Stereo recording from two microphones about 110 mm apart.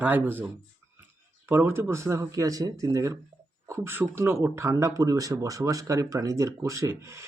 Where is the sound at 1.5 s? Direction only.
20° right (ahead or behind).